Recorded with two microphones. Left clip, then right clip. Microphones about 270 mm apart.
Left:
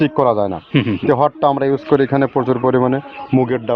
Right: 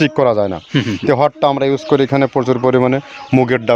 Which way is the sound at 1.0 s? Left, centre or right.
Right.